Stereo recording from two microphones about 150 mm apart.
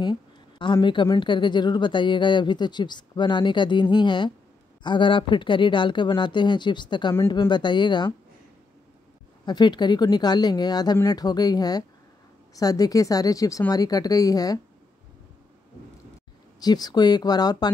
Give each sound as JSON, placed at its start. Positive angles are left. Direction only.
{"t": 0.0, "sound": "a woman's voice", "side_deg": 30}
{"t": 9.5, "sound": "speech", "side_deg": 30}
{"t": 16.5, "sound": "speech", "side_deg": 25}